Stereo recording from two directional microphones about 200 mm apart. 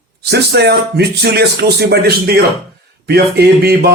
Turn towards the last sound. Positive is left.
turn(degrees=-50)  # may be behind; listen again after turning